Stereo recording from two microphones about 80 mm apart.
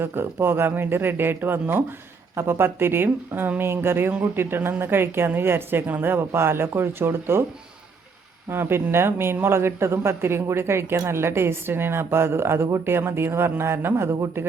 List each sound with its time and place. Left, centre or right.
0.0 s a woman's voice: right
8.4 s a woman's voice: right